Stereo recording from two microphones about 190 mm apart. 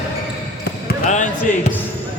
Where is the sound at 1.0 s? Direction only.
40° left (ahead or behind).